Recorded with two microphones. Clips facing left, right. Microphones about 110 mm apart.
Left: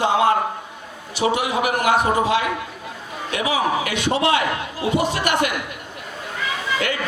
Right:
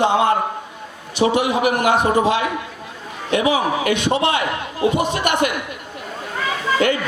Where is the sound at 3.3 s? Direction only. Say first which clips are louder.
Right 3 dB; 25° right (ahead or behind).